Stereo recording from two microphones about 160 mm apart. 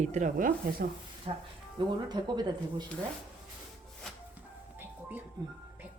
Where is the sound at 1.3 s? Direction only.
35° right (ahead or behind).